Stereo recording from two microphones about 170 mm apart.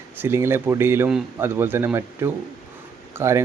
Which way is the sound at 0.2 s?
15° right (ahead or behind).